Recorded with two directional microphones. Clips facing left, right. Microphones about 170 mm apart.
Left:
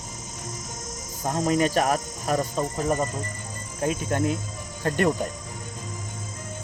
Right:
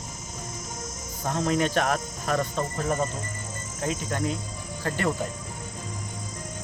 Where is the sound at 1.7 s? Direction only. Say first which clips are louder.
Left 2 dB; 10° left (ahead or behind).